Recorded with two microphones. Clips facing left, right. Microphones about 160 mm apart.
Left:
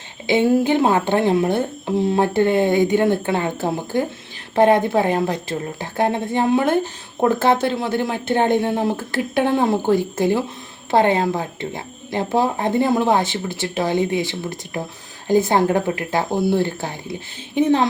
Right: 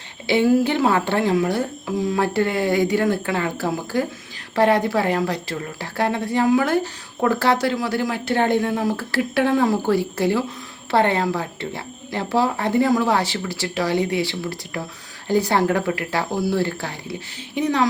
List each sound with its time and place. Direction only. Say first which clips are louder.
0.3 s speech: left 1 dB; 20° left (ahead or behind)